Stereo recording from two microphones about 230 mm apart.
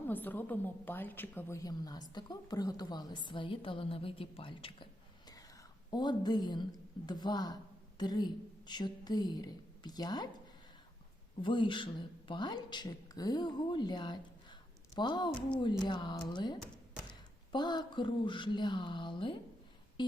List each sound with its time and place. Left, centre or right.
0.1 s a woman's voice: centre; by 4.9 s left
5.9 s a woman's voice: centre
11.4 s speech: left
15.4 s speech: centre
15.9 s speech: centre
20.0 s a sound: centre